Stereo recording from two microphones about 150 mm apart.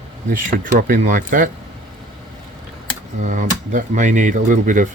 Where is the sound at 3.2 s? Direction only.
60° right (ahead or behind).